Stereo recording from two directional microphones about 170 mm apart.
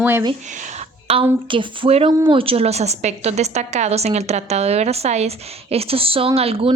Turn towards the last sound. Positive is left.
turn(degrees=-35)  # may be behind; listen again after turning